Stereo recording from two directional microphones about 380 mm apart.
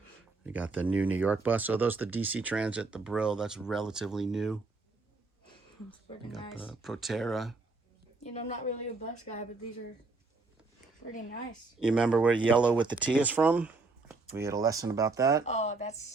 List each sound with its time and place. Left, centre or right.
0.4 s speech: centre
6.5 s speech: centre
8.2 s a woman's voice: centre
11.8 s speech: centre
15.4 s speech: centre